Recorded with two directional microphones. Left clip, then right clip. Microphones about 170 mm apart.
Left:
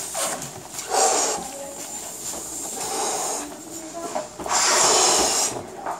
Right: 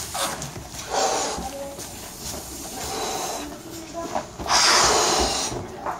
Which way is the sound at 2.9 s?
35° left (ahead or behind).